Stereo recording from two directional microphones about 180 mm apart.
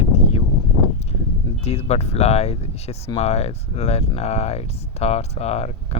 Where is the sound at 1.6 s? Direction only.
35° left (ahead or behind).